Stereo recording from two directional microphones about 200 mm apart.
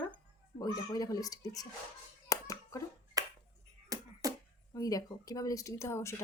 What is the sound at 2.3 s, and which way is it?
Hands, 15° left (ahead or behind).